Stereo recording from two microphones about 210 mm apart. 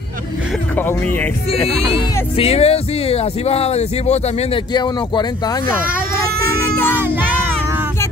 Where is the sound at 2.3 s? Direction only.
30° left (ahead or behind).